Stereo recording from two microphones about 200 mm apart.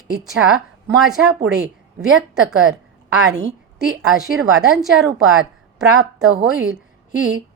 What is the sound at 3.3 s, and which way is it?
Speech, 60° right (ahead or behind).